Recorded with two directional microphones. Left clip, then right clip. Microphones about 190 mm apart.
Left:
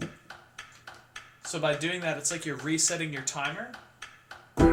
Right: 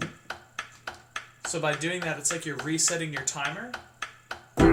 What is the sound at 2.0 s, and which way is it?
Speech, 30° left (ahead or behind).